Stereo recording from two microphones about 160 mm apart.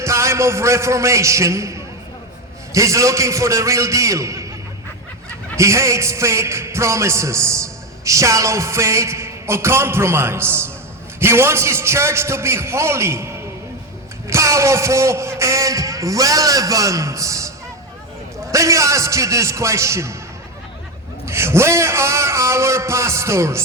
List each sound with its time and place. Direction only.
0.0 s a man's voice: 20° right (ahead or behind)
5.5 s speech: 20° right (ahead or behind)
18.5 s speech: 20° right (ahead or behind)
21.2 s speech: 15° right (ahead or behind)